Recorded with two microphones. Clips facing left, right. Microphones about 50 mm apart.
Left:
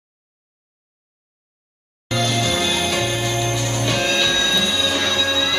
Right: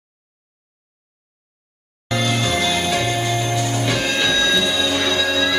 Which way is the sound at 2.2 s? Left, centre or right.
Centre.